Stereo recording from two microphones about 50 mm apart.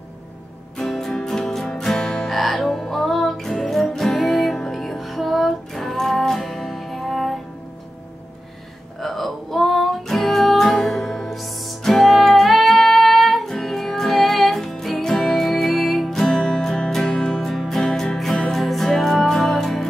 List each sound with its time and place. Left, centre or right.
0.7 s music: centre
9.0 s music: centre
16.2 s music: centre